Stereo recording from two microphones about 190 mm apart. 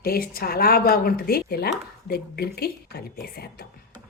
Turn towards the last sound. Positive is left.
turn(degrees=55)  # may be behind; listen again after turning